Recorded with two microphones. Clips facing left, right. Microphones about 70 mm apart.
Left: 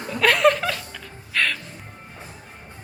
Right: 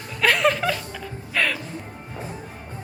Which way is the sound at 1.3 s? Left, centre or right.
Centre.